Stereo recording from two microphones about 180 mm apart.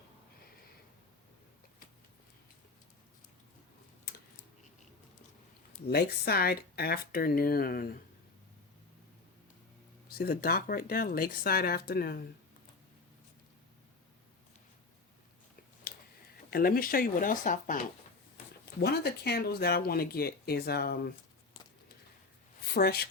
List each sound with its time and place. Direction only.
4.1 s typing: 60° left (ahead or behind)
5.9 s speech: 60° left (ahead or behind)
10.1 s speech: 60° left (ahead or behind)
15.9 s a sound: 55° left (ahead or behind)
16.5 s speech: 55° left (ahead or behind)
18.8 s speech: 65° left (ahead or behind)
22.6 s a woman's voice: 60° left (ahead or behind)